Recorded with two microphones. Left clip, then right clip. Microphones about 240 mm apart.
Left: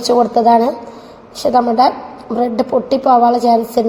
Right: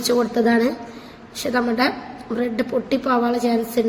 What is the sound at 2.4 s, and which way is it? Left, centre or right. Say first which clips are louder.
A woman's voice: left 8 dB; centre.